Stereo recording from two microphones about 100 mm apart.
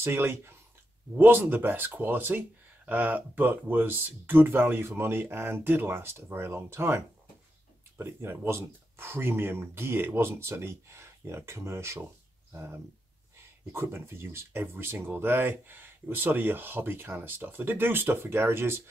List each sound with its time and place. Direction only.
0.0 s speech: 25° right (ahead or behind)
8.0 s speech: 25° right (ahead or behind)